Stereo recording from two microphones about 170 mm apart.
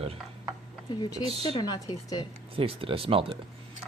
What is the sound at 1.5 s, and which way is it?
Speech, 25° left (ahead or behind).